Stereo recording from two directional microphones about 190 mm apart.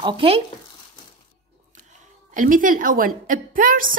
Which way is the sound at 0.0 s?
30° right (ahead or behind).